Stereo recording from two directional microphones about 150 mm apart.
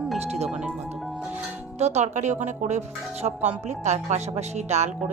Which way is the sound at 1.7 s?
50° right (ahead or behind).